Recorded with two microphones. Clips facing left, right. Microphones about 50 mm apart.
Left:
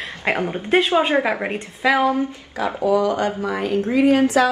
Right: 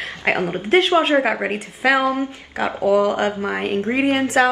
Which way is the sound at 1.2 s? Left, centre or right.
Right.